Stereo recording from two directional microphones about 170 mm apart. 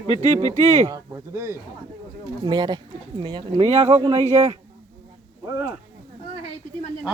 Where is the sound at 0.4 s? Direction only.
45° right (ahead or behind).